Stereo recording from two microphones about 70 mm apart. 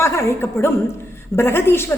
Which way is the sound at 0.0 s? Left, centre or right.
Left.